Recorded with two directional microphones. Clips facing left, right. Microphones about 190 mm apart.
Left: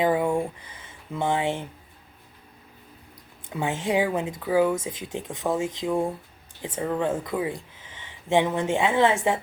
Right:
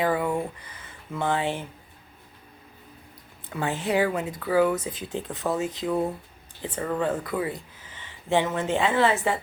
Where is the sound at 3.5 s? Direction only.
20° left (ahead or behind).